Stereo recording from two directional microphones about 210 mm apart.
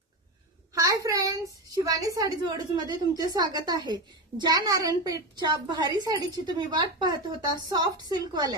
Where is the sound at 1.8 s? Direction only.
15° right (ahead or behind).